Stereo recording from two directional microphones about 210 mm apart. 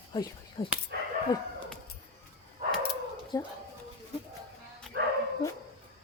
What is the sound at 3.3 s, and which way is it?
Speech, 20° left (ahead or behind).